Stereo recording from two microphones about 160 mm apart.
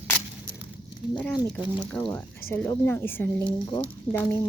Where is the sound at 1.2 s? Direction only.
5° left (ahead or behind).